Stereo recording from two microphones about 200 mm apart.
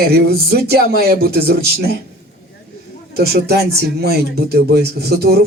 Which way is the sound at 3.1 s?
50° right (ahead or behind).